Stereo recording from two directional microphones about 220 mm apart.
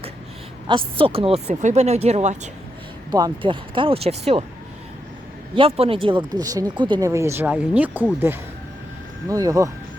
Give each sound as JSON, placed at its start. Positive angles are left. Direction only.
{"t": 0.9, "sound": "speech", "side_deg": -25}
{"t": 3.1, "sound": "speech", "side_deg": -20}
{"t": 5.5, "sound": "speech", "side_deg": -25}
{"t": 9.3, "sound": "speech", "side_deg": -15}